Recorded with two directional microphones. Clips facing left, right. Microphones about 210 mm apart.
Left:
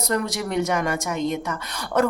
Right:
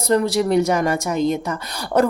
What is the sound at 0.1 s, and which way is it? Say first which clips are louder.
Speech: right 8 dB; 30° right (ahead or behind).